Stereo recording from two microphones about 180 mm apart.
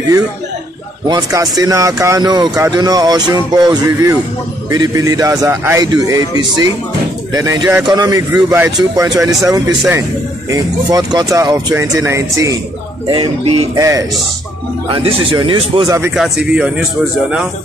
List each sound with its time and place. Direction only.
1.0 s speech: 20° right (ahead or behind)
13.0 s speech: 30° right (ahead or behind)
13.7 s speech: 20° right (ahead or behind)
14.9 s speech: 30° right (ahead or behind)
16.2 s speech: 5° right (ahead or behind)